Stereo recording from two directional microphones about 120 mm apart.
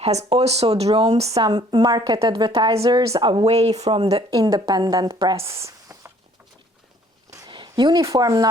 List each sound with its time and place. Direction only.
0.0 s speech: 60° right (ahead or behind)
1.3 s a woman's voice: 35° right (ahead or behind)
3.4 s speech: 60° right (ahead or behind)
3.9 s speech: 45° right (ahead or behind)
4.3 s a woman's voice: 30° right (ahead or behind)
5.5 s a sound: 25° right (ahead or behind)
7.3 s a sound: 25° right (ahead or behind)
7.5 s a sound: 40° right (ahead or behind)
8.0 s a woman's voice: 30° right (ahead or behind)